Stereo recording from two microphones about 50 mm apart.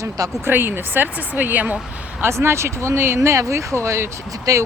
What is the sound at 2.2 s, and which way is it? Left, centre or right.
Speech, right.